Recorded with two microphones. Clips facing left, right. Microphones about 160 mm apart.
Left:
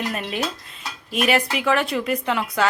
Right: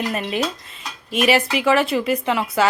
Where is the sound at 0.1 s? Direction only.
Centre (ahead or behind).